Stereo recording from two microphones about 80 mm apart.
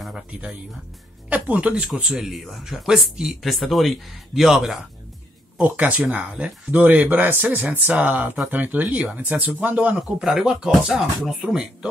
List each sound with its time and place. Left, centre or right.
0.3 s speech: centre
2.0 s speech: centre
5.6 s speech: centre
9.9 s speech: centre